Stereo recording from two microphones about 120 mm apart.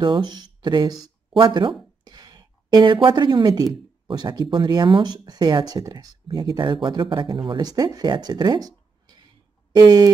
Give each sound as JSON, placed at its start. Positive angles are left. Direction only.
{"t": 0.0, "sound": "speech", "side_deg": -40}
{"t": 7.6, "sound": "speech", "side_deg": -30}